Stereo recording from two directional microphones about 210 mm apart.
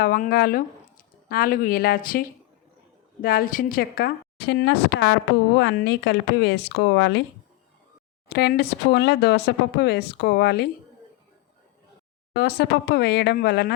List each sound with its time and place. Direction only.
0.0 s speech: 45° left (ahead or behind)
8.3 s speech: 50° left (ahead or behind)
12.3 s speech: 50° left (ahead or behind)